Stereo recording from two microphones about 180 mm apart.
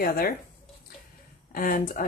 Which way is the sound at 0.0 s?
55° left (ahead or behind).